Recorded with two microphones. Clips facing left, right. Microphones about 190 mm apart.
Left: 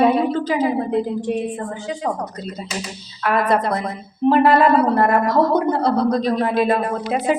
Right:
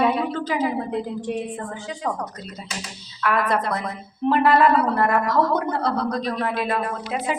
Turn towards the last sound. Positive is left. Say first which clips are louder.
# left 6 dB
turn(degrees=35)  # may be behind; listen again after turning